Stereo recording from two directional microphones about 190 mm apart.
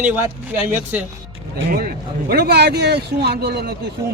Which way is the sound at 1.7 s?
50° right (ahead or behind).